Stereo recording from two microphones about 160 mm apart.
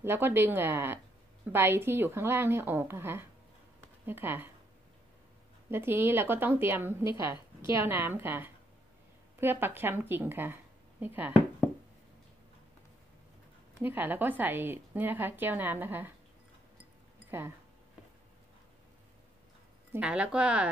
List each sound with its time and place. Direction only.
0.0 s a woman's voice: 15° right (ahead or behind)
5.7 s a woman's voice: 15° right (ahead or behind)
7.1 s a woman's voice: 30° left (ahead or behind)
7.8 s a woman's voice: 15° right (ahead or behind)
13.7 s a woman's voice: 10° right (ahead or behind)
17.3 s a woman's voice: 15° right (ahead or behind)
19.9 s a woman's voice: 5° right (ahead or behind)